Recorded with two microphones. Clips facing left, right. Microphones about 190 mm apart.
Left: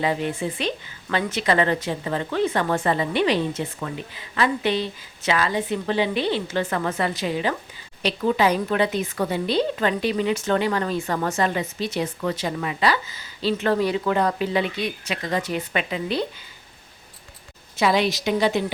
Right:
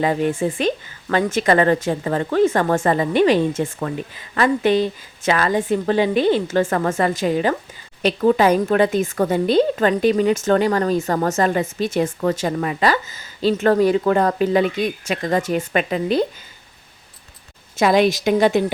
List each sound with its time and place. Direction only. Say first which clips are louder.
0.0 s a woman's voice: right 5 dB; 45° right (ahead or behind)
17.7 s a woman's voice: right 5 dB; 50° right (ahead or behind)